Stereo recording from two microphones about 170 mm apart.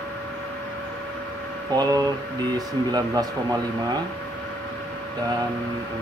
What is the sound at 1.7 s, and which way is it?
Speech, 20° right (ahead or behind).